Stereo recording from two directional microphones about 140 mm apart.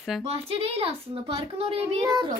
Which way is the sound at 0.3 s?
45° right (ahead or behind).